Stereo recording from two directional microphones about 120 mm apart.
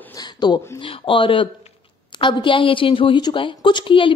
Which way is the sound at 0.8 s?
45° left (ahead or behind).